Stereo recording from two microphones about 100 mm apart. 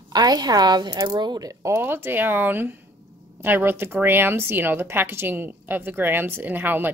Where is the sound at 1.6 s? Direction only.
25° right (ahead or behind).